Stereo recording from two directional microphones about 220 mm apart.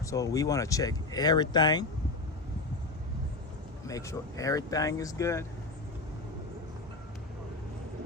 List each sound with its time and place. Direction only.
0.0 s speech: 15° left (ahead or behind)
3.8 s speech: 15° left (ahead or behind)